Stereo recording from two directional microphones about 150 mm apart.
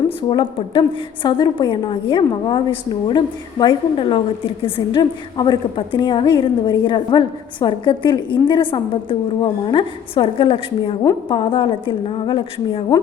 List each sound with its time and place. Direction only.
0.2 s a woman's voice: 30° left (ahead or behind)